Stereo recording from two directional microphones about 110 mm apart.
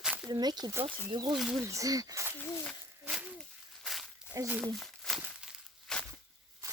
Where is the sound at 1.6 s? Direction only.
30° right (ahead or behind).